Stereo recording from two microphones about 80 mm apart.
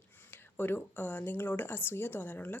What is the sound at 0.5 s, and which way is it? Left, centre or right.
Speech, left.